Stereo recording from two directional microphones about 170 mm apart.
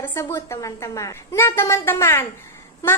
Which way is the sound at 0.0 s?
15° left (ahead or behind).